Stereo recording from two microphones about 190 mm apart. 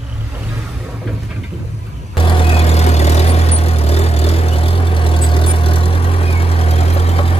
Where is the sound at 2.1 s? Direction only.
25° left (ahead or behind).